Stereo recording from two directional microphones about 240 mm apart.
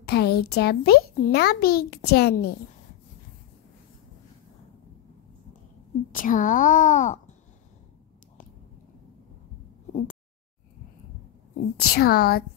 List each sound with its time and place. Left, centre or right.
0.0 s a child's voice: left
6.1 s a child's voice: left
11.7 s a child's voice: left